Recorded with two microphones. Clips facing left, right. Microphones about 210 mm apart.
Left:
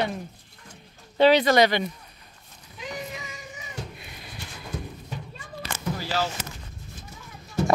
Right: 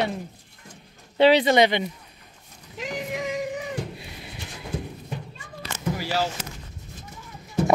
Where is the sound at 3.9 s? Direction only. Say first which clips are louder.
Right 4 dB; 25° right (ahead or behind).